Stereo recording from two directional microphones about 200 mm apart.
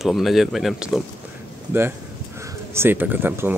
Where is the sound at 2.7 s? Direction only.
10° right (ahead or behind).